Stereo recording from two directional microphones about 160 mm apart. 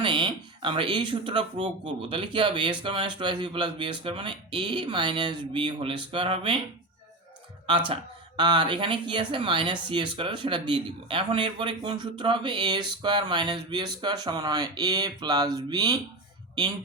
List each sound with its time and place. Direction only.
0.0 s speech: 30° right (ahead or behind)
8.4 s speech: 30° right (ahead or behind)